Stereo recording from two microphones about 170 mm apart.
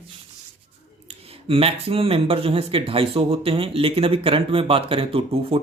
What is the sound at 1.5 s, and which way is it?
Speech, 35° right (ahead or behind).